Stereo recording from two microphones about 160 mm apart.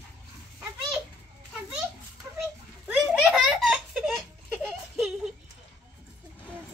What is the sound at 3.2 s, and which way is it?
Giggle, centre (ahead or behind).